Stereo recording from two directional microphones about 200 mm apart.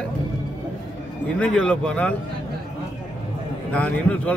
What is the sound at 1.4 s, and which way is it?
Speech, 5° left (ahead or behind).